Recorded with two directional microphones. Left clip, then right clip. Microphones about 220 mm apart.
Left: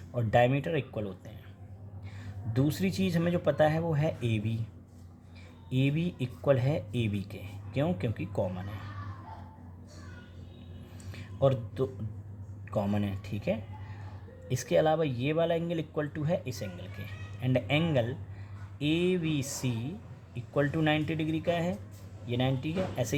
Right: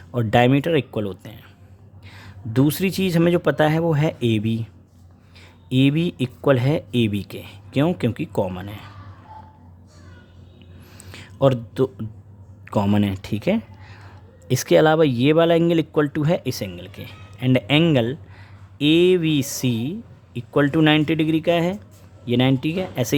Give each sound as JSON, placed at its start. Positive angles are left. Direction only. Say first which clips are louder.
{"t": 0.1, "sound": "speech", "louder": "right 8 dB", "side_deg": -45}
{"t": 5.6, "sound": "speech", "louder": "right 12 dB", "side_deg": -40}
{"t": 11.1, "sound": "a sound", "louder": "right 9 dB", "side_deg": -45}
{"t": 12.6, "sound": "speech", "louder": "right 11 dB", "side_deg": -45}